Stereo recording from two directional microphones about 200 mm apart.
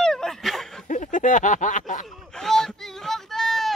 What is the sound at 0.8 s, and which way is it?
Speech, 40° left (ahead or behind).